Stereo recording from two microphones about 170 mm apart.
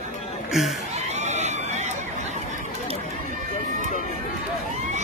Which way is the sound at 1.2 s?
40° right (ahead or behind).